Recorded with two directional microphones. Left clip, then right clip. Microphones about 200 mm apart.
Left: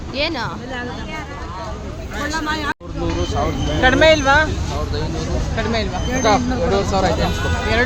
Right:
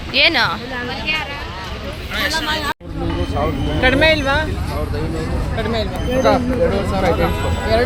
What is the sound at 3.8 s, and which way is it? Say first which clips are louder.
Speech: left 2 dB; 15° left (ahead or behind).